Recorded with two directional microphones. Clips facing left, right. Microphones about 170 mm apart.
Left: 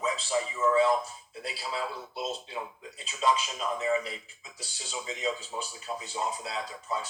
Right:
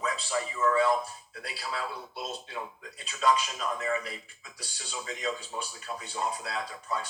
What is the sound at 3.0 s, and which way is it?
Speech, 25° left (ahead or behind).